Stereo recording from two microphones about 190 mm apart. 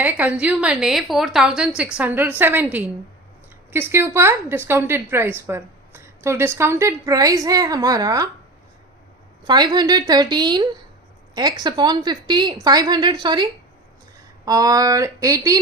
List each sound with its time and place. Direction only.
0.0 s a woman's voice: 10° right (ahead or behind)
3.7 s a woman's voice: 10° right (ahead or behind)
9.4 s a woman's voice: 25° right (ahead or behind)